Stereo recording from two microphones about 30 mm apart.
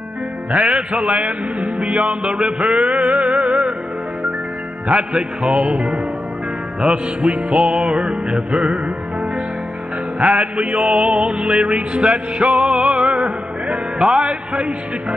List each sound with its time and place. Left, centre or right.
0.5 s speech: right
0.7 s music: right
1.2 s music: right
5.1 s music: right
10.2 s music: right
11.6 s music: right
12.0 s music: right
12.7 s music: right